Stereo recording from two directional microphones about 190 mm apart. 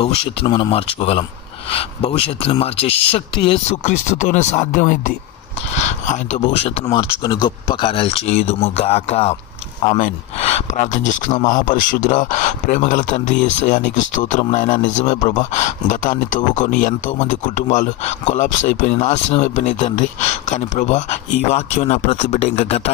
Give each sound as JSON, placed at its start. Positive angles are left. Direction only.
{"t": 0.0, "sound": "speech", "side_deg": 30}